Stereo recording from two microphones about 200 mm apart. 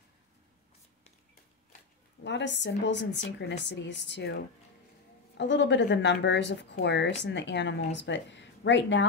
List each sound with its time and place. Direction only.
2.2 s speech: 60° left (ahead or behind)
5.4 s speech: 65° left (ahead or behind)